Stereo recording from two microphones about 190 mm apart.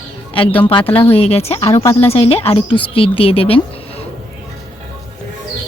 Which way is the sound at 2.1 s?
30° left (ahead or behind).